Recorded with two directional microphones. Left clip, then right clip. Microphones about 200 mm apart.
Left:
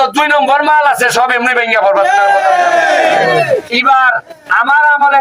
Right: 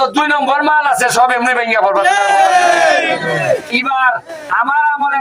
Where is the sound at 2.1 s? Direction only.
30° right (ahead or behind).